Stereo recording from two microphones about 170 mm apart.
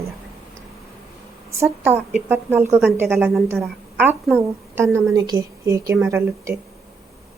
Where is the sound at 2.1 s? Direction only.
15° right (ahead or behind).